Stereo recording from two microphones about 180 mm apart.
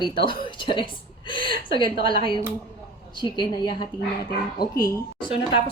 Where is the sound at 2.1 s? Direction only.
25° left (ahead or behind).